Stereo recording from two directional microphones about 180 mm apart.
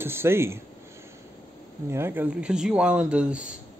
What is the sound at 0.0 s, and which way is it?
Speech, 15° right (ahead or behind).